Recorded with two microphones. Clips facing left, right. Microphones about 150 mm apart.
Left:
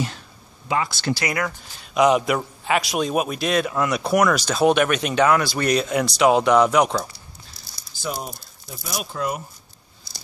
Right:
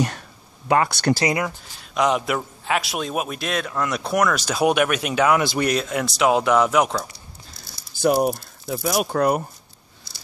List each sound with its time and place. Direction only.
0.7 s speech: 60° right (ahead or behind)
2.0 s a man's voice: centre (ahead or behind)
4.6 s speech: 10° right (ahead or behind)
5.4 s speech: 20° right (ahead or behind)
5.7 s a man's voice: centre (ahead or behind)
8.0 s speech: 65° right (ahead or behind)